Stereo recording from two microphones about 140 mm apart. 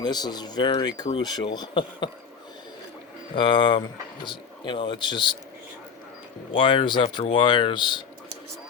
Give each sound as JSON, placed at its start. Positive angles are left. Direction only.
{"t": 0.0, "sound": "speech", "side_deg": 30}
{"t": 3.3, "sound": "speech", "side_deg": 35}
{"t": 6.6, "sound": "speech", "side_deg": 35}